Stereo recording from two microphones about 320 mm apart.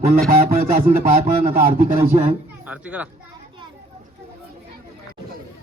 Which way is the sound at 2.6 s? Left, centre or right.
Centre.